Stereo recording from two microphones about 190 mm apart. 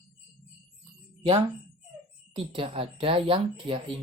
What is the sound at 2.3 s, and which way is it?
Speech, 30° right (ahead or behind).